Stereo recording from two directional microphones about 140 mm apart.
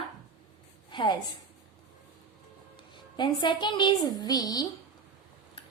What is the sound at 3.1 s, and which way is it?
A woman's voice, 35° left (ahead or behind).